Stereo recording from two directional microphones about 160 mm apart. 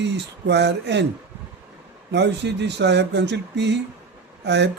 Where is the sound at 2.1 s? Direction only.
90° right.